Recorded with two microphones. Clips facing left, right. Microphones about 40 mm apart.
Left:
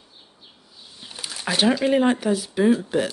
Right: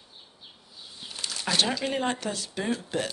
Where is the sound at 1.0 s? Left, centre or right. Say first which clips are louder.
Left 3 dB; centre.